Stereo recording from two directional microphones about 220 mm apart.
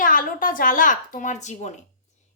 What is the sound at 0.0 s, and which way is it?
A woman's voice, 40° left (ahead or behind).